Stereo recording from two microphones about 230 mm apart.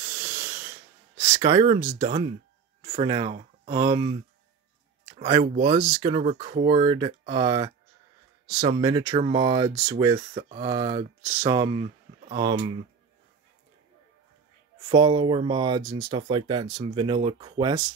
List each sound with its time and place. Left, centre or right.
0.1 s a sound: centre
1.1 s speech: centre
5.1 s a sound: right
5.8 s speech: centre
6.1 s speech: right
14.9 s speech: right